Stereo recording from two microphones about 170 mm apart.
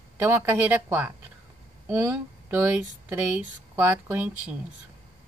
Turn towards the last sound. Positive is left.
turn(degrees=-10)  # may be behind; listen again after turning